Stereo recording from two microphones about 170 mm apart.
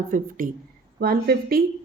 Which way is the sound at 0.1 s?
55° right (ahead or behind).